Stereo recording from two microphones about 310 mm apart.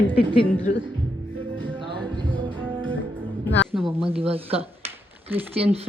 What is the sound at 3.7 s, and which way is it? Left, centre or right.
Speech, centre.